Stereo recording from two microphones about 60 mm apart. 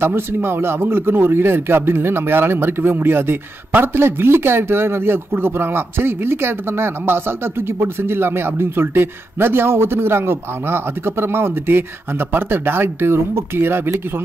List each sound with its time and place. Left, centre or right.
0.0 s a man's voice: right